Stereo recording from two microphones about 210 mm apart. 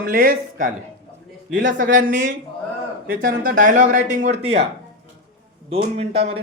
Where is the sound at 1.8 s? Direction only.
40° right (ahead or behind).